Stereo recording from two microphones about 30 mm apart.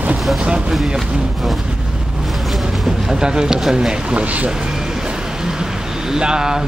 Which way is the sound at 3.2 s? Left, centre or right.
Right.